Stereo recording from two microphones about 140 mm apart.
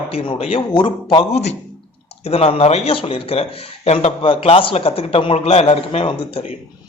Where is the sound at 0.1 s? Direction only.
45° left (ahead or behind).